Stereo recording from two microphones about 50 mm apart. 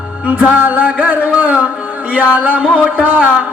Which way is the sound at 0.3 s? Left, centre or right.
Right.